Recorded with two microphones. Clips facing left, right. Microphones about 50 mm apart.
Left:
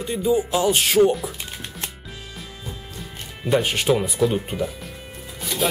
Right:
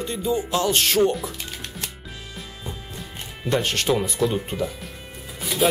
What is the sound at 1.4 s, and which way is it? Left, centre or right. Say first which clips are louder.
Music: even; centre.